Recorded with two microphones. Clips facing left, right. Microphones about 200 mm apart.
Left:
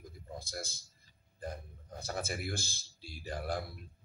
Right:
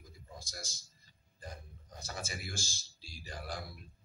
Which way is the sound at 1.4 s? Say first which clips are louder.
Left 6 dB; 55° left (ahead or behind).